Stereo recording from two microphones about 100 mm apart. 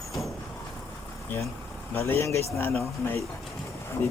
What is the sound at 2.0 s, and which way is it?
Speech, 25° left (ahead or behind).